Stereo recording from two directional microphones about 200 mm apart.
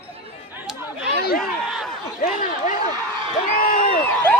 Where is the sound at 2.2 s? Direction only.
40° left (ahead or behind).